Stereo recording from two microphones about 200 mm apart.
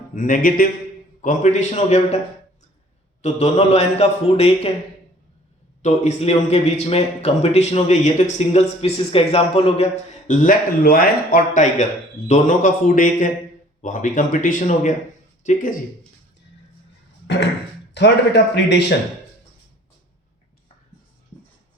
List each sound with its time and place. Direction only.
0.1 s a man's voice: 40° left (ahead or behind)
3.2 s a man's voice: 35° left (ahead or behind)
5.8 s a man's voice: 35° left (ahead or behind)
17.9 s a man's voice: 60° left (ahead or behind)